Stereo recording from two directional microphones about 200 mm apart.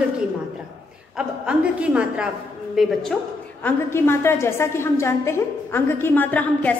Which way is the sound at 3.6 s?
10° left (ahead or behind).